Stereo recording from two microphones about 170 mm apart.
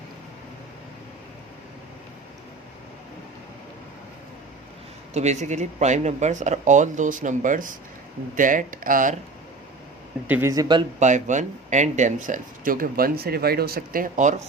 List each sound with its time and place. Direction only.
5.1 s speech: 40° right (ahead or behind)
10.2 s speech: 10° right (ahead or behind)
10.5 s speech: 25° right (ahead or behind)
11.0 s speech: 45° right (ahead or behind)